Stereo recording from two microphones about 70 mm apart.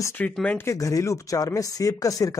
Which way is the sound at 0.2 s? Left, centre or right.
Left.